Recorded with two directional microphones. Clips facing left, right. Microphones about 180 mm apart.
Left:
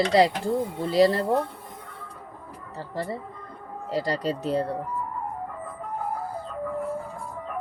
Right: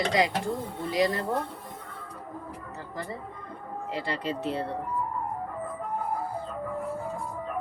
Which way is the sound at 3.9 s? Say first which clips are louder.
Left 6 dB; 40° left (ahead or behind).